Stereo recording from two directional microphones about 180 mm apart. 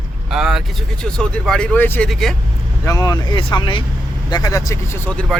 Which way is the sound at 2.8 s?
20° left (ahead or behind).